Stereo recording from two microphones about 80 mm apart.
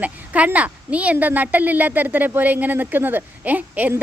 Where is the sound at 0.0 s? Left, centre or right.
Centre.